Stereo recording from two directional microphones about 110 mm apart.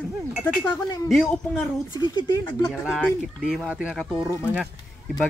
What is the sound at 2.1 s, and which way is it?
Speech, 40° left (ahead or behind).